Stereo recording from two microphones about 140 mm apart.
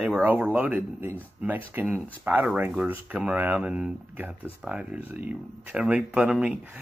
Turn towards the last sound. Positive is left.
turn(degrees=-10)  # may be behind; listen again after turning